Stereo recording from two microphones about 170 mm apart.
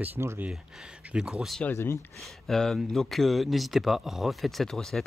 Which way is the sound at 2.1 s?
Centre (ahead or behind).